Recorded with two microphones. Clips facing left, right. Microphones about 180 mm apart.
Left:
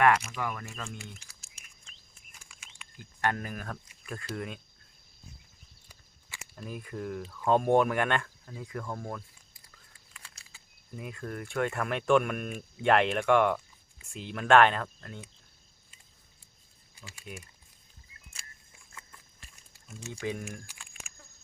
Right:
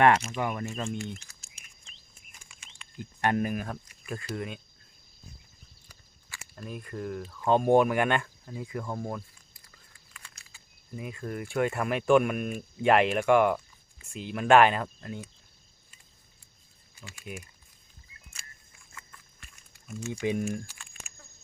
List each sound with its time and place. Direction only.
0.3 s speech: 25° right (ahead or behind)
0.9 s speech: 5° left (ahead or behind)
2.4 s a sound: 5° left (ahead or behind)
3.0 s speech: 15° right (ahead or behind); by 4.6 s centre (ahead or behind)
5.9 s walk: 20° left (ahead or behind)
6.6 s speech: centre (ahead or behind)
10.1 s a sound: 30° left (ahead or behind)
10.9 s speech: centre (ahead or behind)
19.4 s a sound: 30° left (ahead or behind)
20.1 s speech: 20° right (ahead or behind)